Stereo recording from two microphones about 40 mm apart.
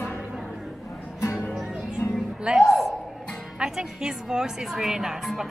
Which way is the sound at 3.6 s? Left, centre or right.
Centre.